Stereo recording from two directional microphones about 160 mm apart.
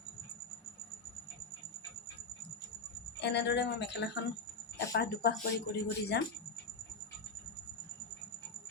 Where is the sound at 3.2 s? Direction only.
90° left.